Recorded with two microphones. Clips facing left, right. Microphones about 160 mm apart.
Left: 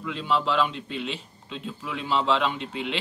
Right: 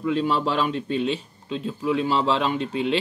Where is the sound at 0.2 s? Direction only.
40° right (ahead or behind).